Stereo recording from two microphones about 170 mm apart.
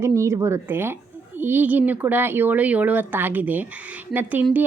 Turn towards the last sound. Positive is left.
turn(degrees=-10)  # may be behind; listen again after turning